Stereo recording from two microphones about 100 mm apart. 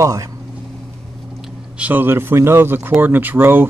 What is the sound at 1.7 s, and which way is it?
Speech, 15° right (ahead or behind).